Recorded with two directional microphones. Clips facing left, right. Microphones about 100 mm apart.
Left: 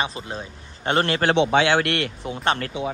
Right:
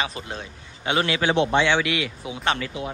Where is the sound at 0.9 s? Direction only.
50° left (ahead or behind).